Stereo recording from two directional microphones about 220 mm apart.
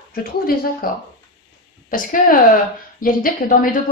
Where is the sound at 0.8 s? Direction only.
40° left (ahead or behind).